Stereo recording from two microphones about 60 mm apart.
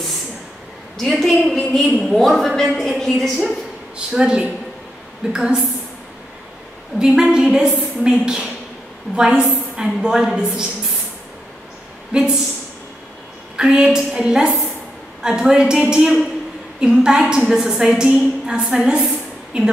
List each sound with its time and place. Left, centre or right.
0.9 s a woman's voice: centre
4.1 s a woman's voice: centre
7.0 s a woman's voice: centre
12.1 s speech: centre
13.6 s a woman's voice: centre